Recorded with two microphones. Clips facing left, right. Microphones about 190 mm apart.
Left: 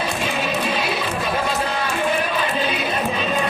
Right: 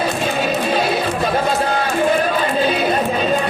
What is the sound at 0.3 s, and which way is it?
Music, 40° right (ahead or behind).